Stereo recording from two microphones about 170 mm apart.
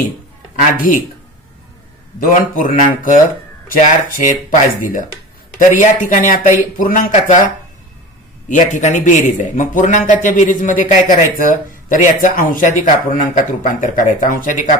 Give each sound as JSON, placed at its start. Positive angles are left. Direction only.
{"t": 2.1, "sound": "a man's voice", "side_deg": 55}